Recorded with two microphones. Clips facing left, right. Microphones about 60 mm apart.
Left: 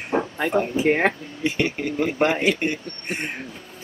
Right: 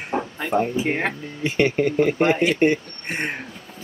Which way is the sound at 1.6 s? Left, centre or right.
Right.